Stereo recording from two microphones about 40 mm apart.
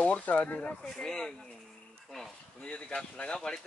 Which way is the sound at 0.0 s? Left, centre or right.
Left.